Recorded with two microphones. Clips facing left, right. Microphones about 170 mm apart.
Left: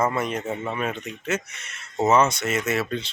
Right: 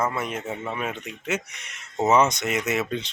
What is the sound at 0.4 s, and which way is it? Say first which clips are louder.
Speech: left 2 dB; 10° left (ahead or behind).